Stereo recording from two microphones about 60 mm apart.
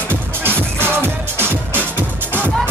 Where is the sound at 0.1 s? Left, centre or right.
Right.